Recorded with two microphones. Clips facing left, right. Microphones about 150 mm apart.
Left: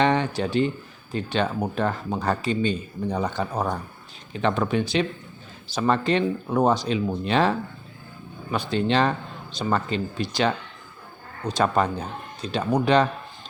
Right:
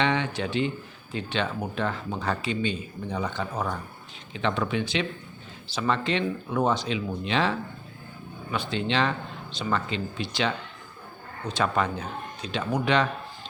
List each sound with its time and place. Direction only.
0.0 s speech: 40° left (ahead or behind)
8.5 s speech: 40° left (ahead or behind)